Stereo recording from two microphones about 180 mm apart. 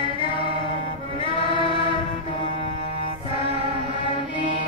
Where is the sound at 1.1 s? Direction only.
25° left (ahead or behind).